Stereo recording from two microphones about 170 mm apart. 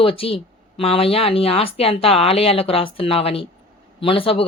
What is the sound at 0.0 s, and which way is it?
Speech, 35° left (ahead or behind).